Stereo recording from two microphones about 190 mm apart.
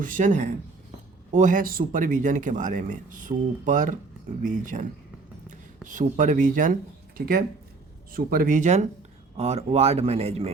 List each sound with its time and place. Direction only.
0.0 s a man's voice: 45° right (ahead or behind)
8.1 s a man's voice: 50° right (ahead or behind); by 10.5 s 35° right (ahead or behind)